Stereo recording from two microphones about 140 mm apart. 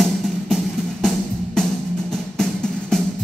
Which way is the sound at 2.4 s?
5° left (ahead or behind).